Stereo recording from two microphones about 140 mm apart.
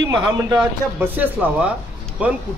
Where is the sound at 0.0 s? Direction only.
30° right (ahead or behind).